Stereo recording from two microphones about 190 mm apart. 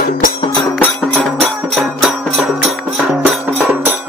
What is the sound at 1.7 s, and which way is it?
Music, 5° right (ahead or behind).